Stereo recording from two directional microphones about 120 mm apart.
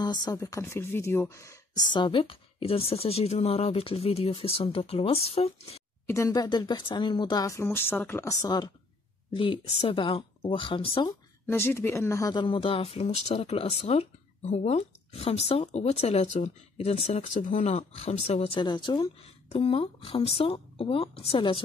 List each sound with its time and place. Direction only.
0.0 s speech: 35° left (ahead or behind)
1.9 s a woman's voice: 40° left (ahead or behind)
6.0 s speech: 25° left (ahead or behind)
8.3 s speech: 30° left (ahead or behind)
9.3 s a woman's voice: 45° left (ahead or behind)
11.4 s speech: 20° left (ahead or behind)
12.4 s speech: 45° left (ahead or behind); by 17.6 s 85° left
17.6 s speech: 55° left (ahead or behind)
18.6 s speech: 40° left (ahead or behind)
19.5 s a woman's voice: 50° left (ahead or behind)